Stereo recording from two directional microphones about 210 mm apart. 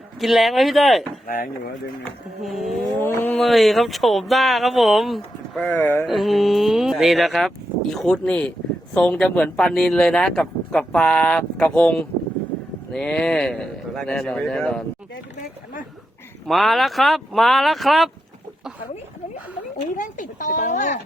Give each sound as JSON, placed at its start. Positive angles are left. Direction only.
{"t": 0.2, "sound": "speech", "side_deg": 0}
{"t": 1.3, "sound": "speech", "side_deg": 40}
{"t": 2.0, "sound": "speech", "side_deg": 0}
{"t": 16.5, "sound": "speech", "side_deg": 0}
{"t": 20.0, "sound": "a sound", "side_deg": 40}